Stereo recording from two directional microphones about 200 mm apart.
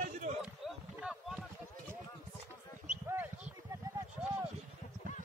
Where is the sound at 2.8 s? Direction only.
5° right (ahead or behind).